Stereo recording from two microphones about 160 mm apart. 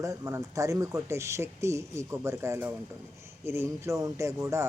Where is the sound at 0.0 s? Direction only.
20° right (ahead or behind).